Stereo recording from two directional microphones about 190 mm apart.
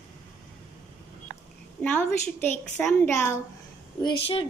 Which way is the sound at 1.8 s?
10° left (ahead or behind).